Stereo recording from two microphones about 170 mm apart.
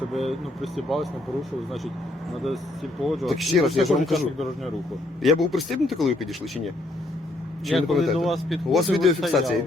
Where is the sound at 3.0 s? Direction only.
Centre (ahead or behind).